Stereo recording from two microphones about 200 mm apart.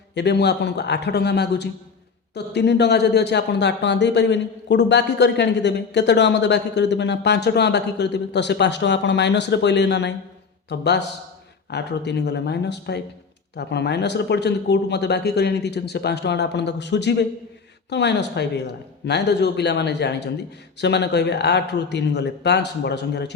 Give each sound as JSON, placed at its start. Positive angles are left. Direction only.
{"t": 0.1, "sound": "speech", "side_deg": 60}